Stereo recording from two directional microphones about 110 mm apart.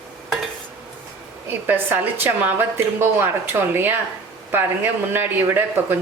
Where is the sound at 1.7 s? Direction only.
20° right (ahead or behind).